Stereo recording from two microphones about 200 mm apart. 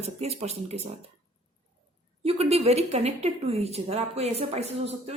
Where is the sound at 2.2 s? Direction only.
30° right (ahead or behind).